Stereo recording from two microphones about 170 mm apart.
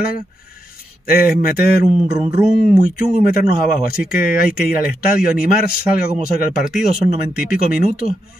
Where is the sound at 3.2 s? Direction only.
60° left (ahead or behind).